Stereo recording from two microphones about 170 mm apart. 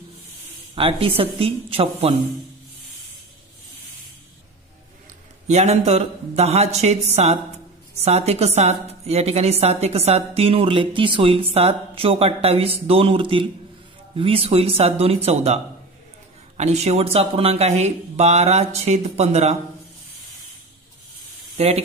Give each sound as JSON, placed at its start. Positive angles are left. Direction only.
{"t": 0.7, "sound": "a woman's voice", "side_deg": -35}
{"t": 5.5, "sound": "a woman's voice", "side_deg": -40}
{"t": 21.5, "sound": "speech", "side_deg": -35}